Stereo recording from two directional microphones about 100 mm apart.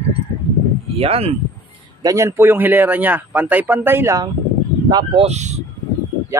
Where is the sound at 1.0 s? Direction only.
80° right.